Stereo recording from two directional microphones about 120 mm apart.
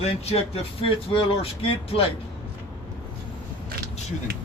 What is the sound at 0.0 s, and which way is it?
Speech, 60° left (ahead or behind).